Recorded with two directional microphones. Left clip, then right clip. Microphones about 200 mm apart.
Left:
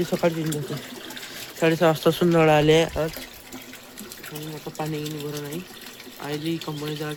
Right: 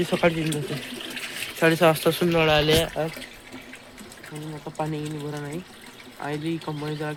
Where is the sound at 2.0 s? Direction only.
20° left (ahead or behind).